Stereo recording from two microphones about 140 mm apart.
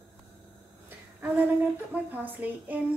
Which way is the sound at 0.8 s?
10° right (ahead or behind).